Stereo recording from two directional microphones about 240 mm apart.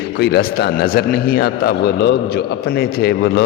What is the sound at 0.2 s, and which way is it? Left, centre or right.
A man's voice, left.